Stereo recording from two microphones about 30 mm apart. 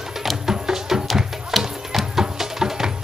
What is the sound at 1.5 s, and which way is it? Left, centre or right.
Music, centre.